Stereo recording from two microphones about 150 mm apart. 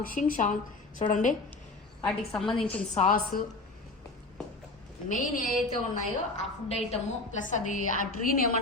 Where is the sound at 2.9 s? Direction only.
50° left (ahead or behind).